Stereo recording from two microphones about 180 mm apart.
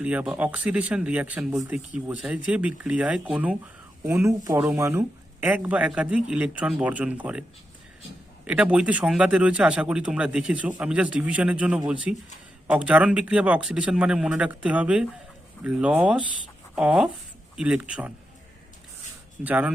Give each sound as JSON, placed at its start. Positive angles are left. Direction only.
{"t": 0.0, "sound": "speech", "side_deg": -5}
{"t": 8.4, "sound": "speech", "side_deg": -5}
{"t": 19.5, "sound": "speech", "side_deg": -10}